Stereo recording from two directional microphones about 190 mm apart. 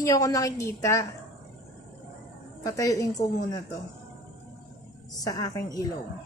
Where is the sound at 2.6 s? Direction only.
20° left (ahead or behind).